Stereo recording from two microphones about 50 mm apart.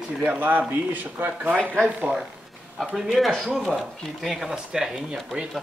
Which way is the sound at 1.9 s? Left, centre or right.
Right.